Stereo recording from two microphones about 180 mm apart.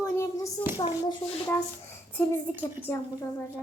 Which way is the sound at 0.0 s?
15° left (ahead or behind).